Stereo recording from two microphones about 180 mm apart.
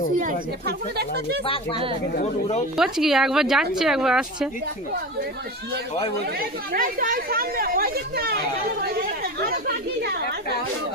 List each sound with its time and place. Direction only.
0.2 s speech: 55° right (ahead or behind)
2.1 s speech: 40° left (ahead or behind)
2.7 s speech: centre (ahead or behind)
6.7 s speech: 50° right (ahead or behind)
8.8 s chatter: 55° right (ahead or behind)